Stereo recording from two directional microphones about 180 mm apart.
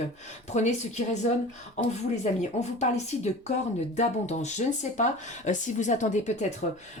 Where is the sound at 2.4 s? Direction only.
40° left (ahead or behind).